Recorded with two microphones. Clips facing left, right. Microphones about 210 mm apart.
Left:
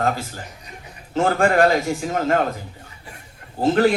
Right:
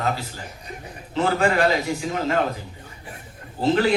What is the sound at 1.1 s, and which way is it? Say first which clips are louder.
A man's voice: left 3 dB; 45° left (ahead or behind).